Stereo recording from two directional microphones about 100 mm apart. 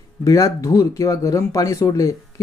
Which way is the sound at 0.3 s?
35° left (ahead or behind).